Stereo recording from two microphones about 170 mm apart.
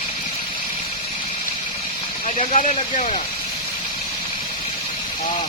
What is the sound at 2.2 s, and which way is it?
Speech, 45° left (ahead or behind).